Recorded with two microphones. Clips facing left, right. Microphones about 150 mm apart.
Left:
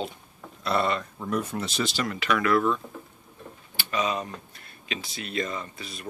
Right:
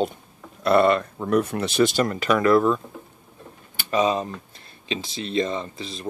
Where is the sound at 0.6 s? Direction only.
55° right (ahead or behind); by 2.8 s 35° right (ahead or behind).